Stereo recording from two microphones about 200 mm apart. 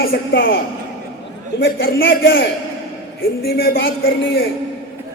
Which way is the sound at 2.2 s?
50° left (ahead or behind).